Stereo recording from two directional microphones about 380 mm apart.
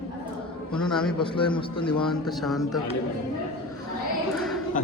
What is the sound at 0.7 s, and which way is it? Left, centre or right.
Speech, centre.